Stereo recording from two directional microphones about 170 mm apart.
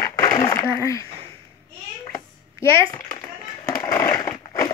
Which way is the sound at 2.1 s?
15° left (ahead or behind).